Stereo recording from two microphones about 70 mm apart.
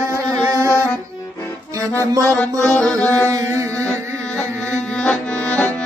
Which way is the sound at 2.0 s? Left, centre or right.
Right.